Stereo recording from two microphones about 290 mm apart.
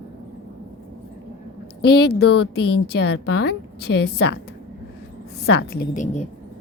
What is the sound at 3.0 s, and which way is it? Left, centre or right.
Speech, left.